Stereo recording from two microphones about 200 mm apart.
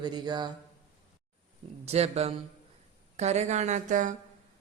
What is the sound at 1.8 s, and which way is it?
Speech, 30° right (ahead or behind).